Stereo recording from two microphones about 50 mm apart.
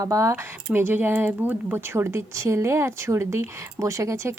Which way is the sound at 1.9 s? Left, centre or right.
Right.